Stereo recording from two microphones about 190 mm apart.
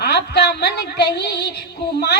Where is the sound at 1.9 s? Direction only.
60° left (ahead or behind).